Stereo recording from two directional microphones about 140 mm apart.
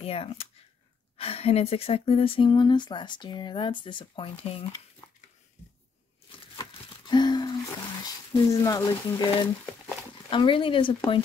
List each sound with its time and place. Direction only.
0.0 s speech: 45° left (ahead or behind)
6.5 s crumpling: 30° left (ahead or behind)
8.0 s speech: 25° left (ahead or behind)
10.3 s speech: 35° left (ahead or behind)